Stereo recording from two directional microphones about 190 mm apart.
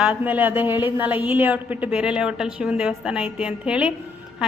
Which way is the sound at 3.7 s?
5° right (ahead or behind).